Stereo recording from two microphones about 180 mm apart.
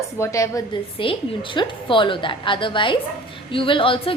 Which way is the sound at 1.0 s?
30° left (ahead or behind).